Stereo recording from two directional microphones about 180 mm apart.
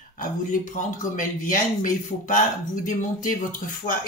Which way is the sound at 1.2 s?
50° left (ahead or behind).